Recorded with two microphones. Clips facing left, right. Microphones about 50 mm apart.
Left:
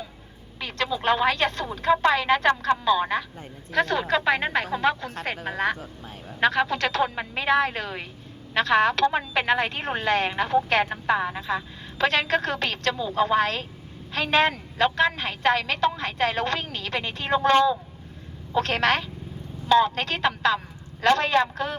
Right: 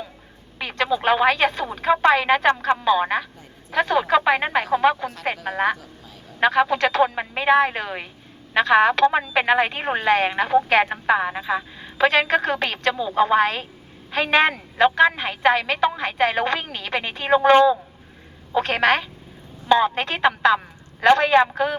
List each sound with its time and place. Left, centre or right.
0.6 s speech: centre